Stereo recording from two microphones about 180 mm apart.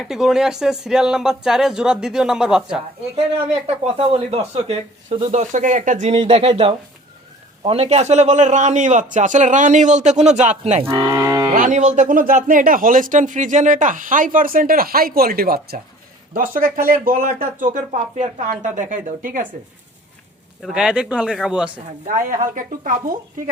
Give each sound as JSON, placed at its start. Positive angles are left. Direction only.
{"t": 0.0, "sound": "speech", "side_deg": 0}
{"t": 3.2, "sound": "a man's voice", "side_deg": -35}
{"t": 10.8, "sound": "speech", "side_deg": -15}
{"t": 11.5, "sound": "speech", "side_deg": -45}
{"t": 20.6, "sound": "speech", "side_deg": -5}
{"t": 22.0, "sound": "speech", "side_deg": -45}